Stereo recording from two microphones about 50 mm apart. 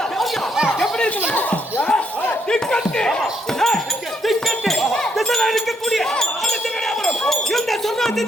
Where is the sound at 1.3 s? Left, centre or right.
Left.